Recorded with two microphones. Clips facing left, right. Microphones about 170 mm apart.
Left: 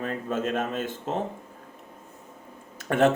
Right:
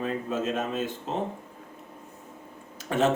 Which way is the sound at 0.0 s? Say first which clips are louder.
Even; 50° left (ahead or behind).